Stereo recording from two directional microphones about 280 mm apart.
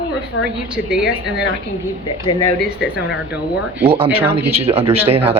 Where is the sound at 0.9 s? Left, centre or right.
Centre.